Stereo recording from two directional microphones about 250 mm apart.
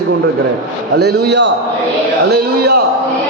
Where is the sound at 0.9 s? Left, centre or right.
Right.